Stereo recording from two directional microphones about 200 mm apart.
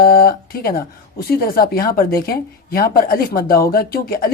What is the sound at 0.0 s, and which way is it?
Speech, 50° left (ahead or behind).